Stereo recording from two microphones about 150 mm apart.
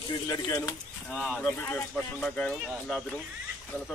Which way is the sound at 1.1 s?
5° left (ahead or behind).